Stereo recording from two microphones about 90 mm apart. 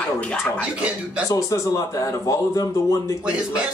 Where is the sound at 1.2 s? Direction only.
40° left (ahead or behind).